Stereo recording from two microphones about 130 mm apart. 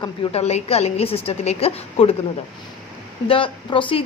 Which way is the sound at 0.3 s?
55° left (ahead or behind).